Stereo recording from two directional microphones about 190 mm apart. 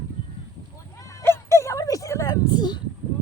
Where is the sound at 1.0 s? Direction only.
15° left (ahead or behind).